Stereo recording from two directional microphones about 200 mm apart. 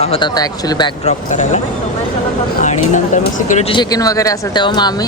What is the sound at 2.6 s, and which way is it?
Speech, 35° left (ahead or behind).